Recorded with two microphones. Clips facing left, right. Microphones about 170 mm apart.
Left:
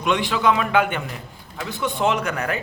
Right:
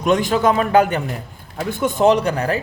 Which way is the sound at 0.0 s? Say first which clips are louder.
Right 4 dB; 45° right (ahead or behind).